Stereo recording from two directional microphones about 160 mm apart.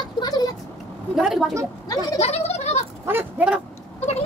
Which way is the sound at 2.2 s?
40° left (ahead or behind).